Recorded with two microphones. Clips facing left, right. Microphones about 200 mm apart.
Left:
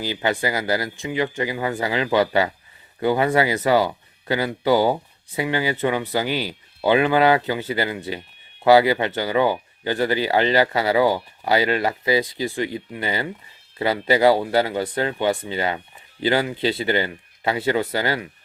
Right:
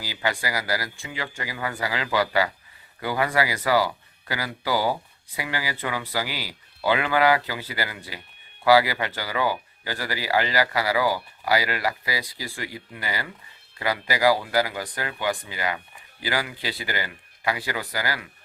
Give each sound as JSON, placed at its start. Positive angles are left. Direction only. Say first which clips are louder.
{"t": 0.0, "sound": "speech", "louder": "left 6 dB", "side_deg": 20}